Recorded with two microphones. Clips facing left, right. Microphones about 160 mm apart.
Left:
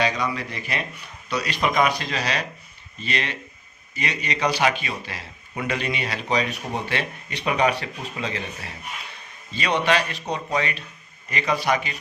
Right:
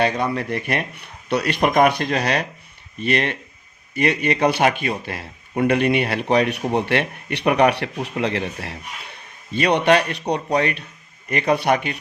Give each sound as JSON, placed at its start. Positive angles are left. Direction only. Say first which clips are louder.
{"t": 0.0, "sound": "speech", "louder": "right 4 dB", "side_deg": -55}